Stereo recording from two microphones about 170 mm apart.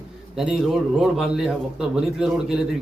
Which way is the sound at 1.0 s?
Centre (ahead or behind).